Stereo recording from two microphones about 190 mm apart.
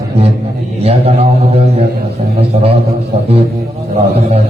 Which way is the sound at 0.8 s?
30° right (ahead or behind).